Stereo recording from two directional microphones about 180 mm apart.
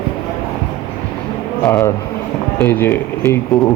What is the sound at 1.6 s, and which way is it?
Speech, 15° left (ahead or behind).